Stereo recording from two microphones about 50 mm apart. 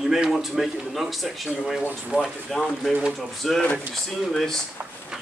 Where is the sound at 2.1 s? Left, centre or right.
Right.